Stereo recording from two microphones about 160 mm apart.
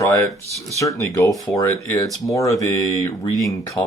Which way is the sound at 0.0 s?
20° left (ahead or behind).